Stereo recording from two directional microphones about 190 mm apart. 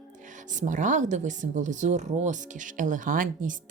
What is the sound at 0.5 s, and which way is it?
Speech, 40° right (ahead or behind).